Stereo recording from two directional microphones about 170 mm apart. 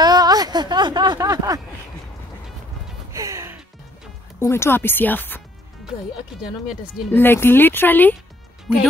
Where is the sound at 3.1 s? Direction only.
20° right (ahead or behind).